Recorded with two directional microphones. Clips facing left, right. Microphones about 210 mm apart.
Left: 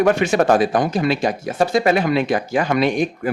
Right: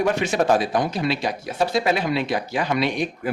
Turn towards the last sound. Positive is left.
turn(degrees=45)  # may be behind; listen again after turning